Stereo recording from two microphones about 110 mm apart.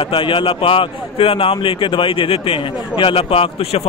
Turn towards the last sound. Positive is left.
turn(degrees=60)  # may be behind; listen again after turning